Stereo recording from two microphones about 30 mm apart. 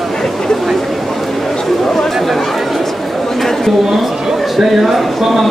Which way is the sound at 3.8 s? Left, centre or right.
Centre.